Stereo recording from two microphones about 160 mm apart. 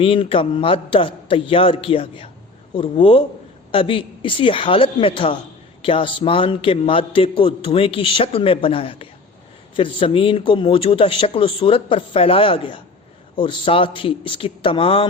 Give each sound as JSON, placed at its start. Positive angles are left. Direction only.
{"t": 0.0, "sound": "a man's voice", "side_deg": 35}